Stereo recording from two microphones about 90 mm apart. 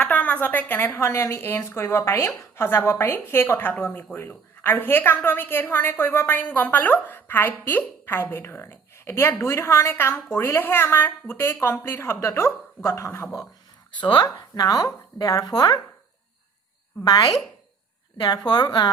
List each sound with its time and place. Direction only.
0.0 s a woman's voice: 15° left (ahead or behind)
14.0 s speech: 60° left (ahead or behind)
14.3 s speech: 45° left (ahead or behind)
17.0 s speech: 45° left (ahead or behind)